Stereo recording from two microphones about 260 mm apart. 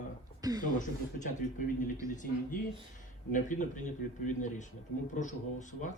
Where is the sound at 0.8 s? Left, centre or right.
Left.